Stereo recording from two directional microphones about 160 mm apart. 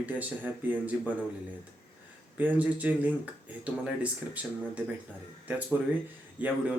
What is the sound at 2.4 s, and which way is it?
Speech, 10° right (ahead or behind).